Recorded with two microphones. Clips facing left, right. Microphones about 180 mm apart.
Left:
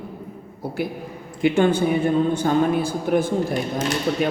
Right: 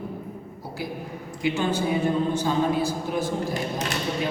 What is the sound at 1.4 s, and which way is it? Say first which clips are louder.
A man's voice: left 7 dB; 55° left (ahead or behind).